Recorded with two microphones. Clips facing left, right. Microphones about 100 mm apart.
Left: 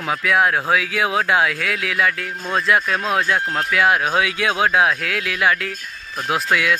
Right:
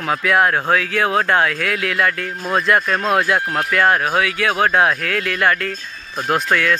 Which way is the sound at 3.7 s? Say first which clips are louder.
Right 1 dB; 5° left (ahead or behind).